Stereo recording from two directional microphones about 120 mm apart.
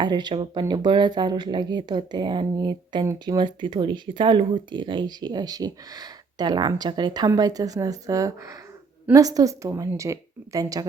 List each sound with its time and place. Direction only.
0.0 s a woman's voice: 35° right (ahead or behind)